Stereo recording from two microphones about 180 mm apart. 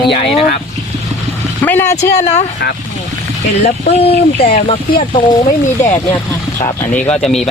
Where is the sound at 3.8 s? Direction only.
35° left (ahead or behind).